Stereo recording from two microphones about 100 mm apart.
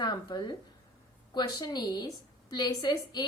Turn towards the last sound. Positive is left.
turn(degrees=45)  # may be behind; listen again after turning